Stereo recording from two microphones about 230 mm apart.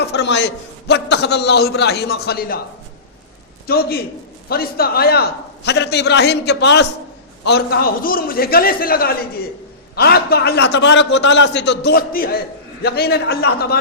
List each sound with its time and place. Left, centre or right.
0.0 s a man's voice: left
3.7 s a man's voice: left